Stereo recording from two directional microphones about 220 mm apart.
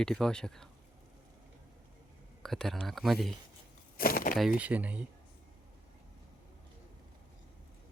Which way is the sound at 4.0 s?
40° left (ahead or behind).